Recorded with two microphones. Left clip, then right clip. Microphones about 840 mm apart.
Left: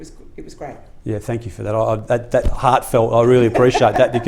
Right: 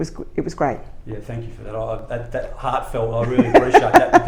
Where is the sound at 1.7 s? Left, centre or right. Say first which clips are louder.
Left 8 dB; left.